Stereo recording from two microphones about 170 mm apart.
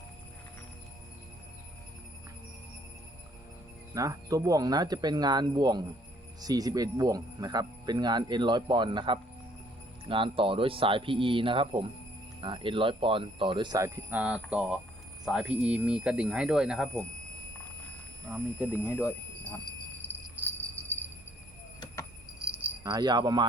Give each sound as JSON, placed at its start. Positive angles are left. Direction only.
{"t": 3.9, "sound": "speech", "side_deg": -20}
{"t": 18.8, "sound": "speech", "side_deg": 15}
{"t": 20.3, "sound": "jingle bell", "side_deg": -15}
{"t": 22.4, "sound": "keys jangling", "side_deg": -5}
{"t": 22.8, "sound": "speech", "side_deg": -25}